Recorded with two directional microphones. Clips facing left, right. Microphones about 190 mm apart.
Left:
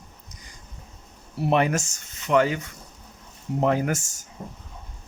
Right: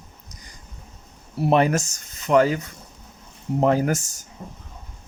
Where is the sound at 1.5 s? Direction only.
40° right (ahead or behind).